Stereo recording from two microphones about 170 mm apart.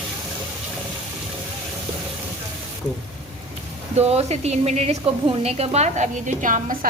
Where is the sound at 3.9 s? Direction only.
40° right (ahead or behind).